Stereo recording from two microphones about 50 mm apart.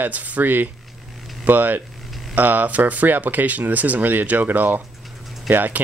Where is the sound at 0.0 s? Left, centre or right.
Right.